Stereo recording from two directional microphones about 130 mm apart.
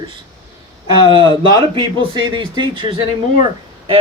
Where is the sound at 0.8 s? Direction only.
40° left (ahead or behind).